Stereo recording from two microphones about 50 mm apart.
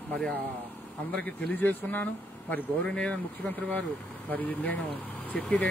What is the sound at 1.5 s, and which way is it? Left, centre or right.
Speech, left.